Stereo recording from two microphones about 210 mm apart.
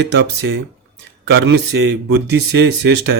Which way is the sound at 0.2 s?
65° right (ahead or behind).